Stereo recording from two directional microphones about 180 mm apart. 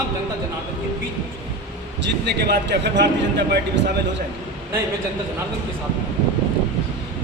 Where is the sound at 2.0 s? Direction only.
70° right (ahead or behind).